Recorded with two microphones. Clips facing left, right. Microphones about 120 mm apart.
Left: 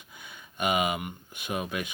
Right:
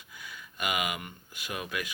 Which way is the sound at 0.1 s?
25° left (ahead or behind).